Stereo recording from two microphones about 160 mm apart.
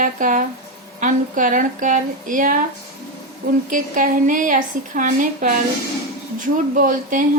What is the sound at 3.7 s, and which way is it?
Speech, 55° right (ahead or behind).